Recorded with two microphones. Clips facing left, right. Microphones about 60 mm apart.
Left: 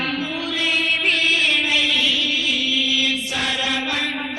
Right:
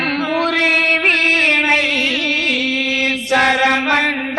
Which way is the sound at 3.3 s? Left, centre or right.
Right.